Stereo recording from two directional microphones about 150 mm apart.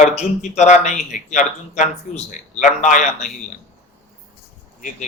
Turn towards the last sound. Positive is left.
turn(degrees=55)  # may be behind; listen again after turning